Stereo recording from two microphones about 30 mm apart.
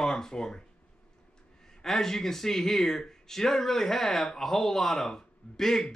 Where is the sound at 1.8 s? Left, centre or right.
Centre.